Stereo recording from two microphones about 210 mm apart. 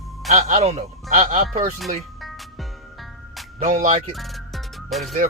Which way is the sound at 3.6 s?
35° right (ahead or behind).